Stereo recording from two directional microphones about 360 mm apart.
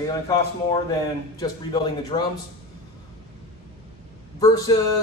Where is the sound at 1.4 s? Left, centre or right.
Centre.